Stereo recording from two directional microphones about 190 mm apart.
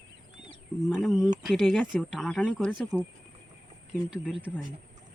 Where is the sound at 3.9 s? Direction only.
5° right (ahead or behind).